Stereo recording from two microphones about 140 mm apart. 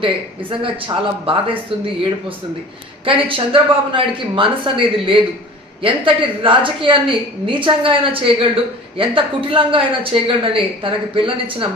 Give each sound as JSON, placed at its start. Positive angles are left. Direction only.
{"t": 0.0, "sound": "speech", "side_deg": -40}
{"t": 3.1, "sound": "speech", "side_deg": -40}